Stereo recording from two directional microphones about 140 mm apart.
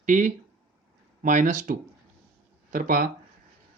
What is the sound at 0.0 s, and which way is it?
Speech, 65° right (ahead or behind).